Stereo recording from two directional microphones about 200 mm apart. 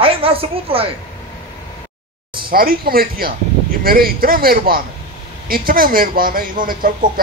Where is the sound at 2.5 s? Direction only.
45° right (ahead or behind).